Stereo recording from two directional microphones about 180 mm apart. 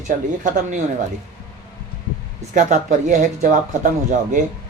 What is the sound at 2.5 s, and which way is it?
Speech, 40° right (ahead or behind).